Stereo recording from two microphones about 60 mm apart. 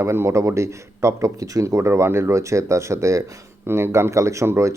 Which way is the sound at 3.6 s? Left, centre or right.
Right.